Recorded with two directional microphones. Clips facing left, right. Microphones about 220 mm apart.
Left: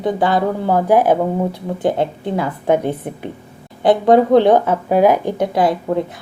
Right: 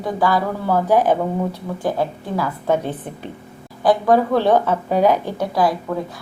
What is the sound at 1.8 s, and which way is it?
Speech, 25° left (ahead or behind).